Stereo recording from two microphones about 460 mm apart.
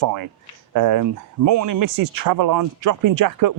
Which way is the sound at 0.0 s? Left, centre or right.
Right.